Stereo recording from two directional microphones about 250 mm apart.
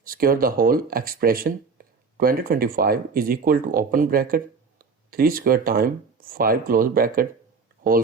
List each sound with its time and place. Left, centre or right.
0.0 s speech: right